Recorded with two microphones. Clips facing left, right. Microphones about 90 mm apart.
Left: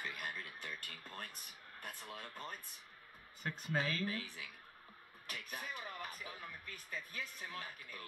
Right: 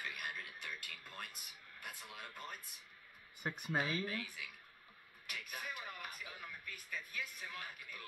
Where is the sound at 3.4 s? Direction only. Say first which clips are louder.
Even; 15° right (ahead or behind).